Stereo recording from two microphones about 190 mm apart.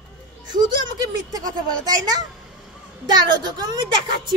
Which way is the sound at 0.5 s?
20° right (ahead or behind).